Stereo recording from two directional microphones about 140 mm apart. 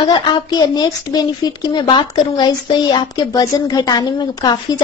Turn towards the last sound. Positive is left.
turn(degrees=30)  # may be behind; listen again after turning